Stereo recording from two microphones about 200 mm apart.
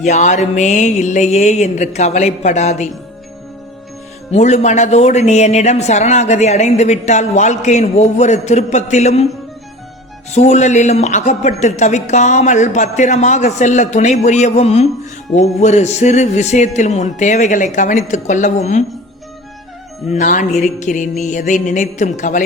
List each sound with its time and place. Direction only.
0.0 s speech: 35° left (ahead or behind)
4.3 s speech: 35° left (ahead or behind)
10.3 s speech: 35° left (ahead or behind)
20.1 s speech: 40° left (ahead or behind)